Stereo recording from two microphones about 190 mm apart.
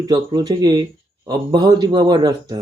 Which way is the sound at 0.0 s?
20° right (ahead or behind).